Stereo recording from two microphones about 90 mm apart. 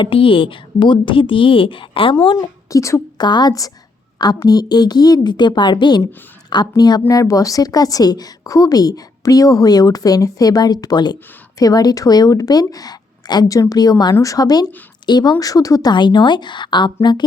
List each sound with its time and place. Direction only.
0.0 s speech: 85° left
2.6 s a woman's voice: 35° left (ahead or behind)
3.2 s a woman's voice: 55° left (ahead or behind)
7.1 s a woman's voice: 40° left (ahead or behind); by 17.2 s 55° left (ahead or behind)